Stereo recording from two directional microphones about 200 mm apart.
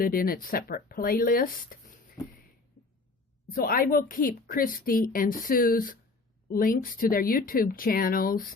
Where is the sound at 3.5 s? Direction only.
45° left (ahead or behind).